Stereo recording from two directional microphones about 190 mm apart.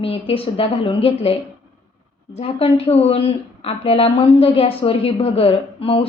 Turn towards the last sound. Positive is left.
turn(degrees=30)  # may be behind; listen again after turning